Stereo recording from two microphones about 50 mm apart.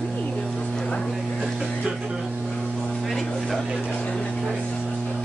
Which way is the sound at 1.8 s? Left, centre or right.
Centre.